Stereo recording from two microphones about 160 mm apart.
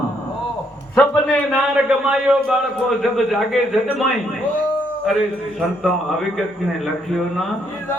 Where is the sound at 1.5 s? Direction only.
5° right (ahead or behind).